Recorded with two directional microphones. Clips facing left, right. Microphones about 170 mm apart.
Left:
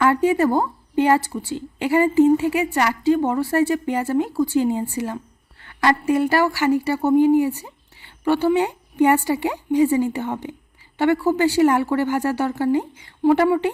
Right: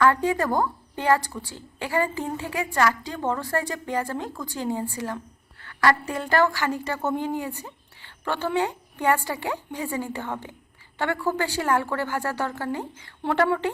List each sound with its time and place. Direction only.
0.0 s a woman's voice: 15° left (ahead or behind)